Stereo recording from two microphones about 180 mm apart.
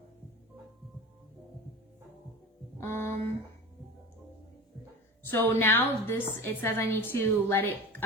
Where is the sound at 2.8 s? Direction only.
15° left (ahead or behind).